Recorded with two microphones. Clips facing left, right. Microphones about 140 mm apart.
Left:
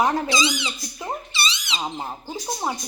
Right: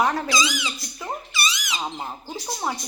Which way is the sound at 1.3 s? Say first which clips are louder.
Even; 25° left (ahead or behind).